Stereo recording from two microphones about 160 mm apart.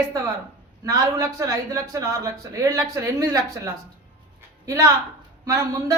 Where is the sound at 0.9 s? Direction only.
20° right (ahead or behind).